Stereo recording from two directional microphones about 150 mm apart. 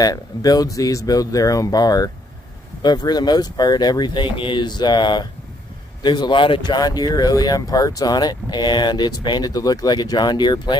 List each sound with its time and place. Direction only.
0.0 s speech: 25° left (ahead or behind)